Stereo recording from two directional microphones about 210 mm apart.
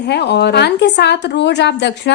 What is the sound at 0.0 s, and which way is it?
A woman's voice, 50° left (ahead or behind).